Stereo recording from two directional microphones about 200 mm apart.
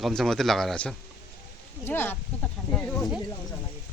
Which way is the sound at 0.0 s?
Centre (ahead or behind).